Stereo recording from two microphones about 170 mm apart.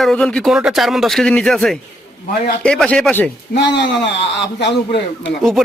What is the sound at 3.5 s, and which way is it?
A man's voice, 85° left.